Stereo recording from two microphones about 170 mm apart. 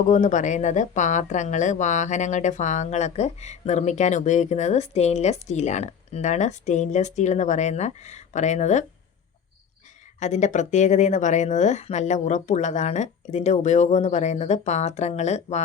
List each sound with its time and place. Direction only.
0.1 s a woman's voice: 50° left (ahead or behind)
10.2 s a woman's voice: 45° left (ahead or behind)